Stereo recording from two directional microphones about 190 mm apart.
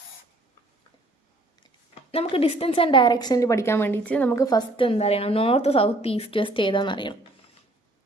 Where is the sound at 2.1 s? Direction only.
30° left (ahead or behind).